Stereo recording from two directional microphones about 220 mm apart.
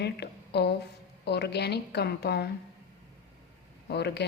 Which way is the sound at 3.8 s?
50° left (ahead or behind).